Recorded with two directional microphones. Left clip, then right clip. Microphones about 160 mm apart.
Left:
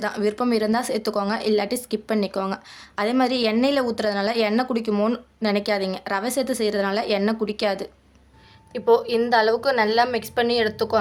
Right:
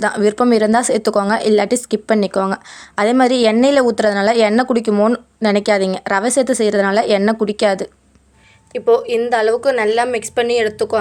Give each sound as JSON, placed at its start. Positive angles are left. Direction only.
{"t": 0.0, "sound": "speech", "side_deg": -45}
{"t": 8.7, "sound": "a woman's voice", "side_deg": -15}